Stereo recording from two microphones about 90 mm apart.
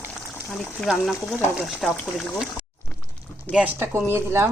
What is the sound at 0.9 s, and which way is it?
Speech, centre (ahead or behind).